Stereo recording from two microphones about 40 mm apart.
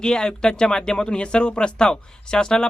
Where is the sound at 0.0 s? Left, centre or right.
Centre.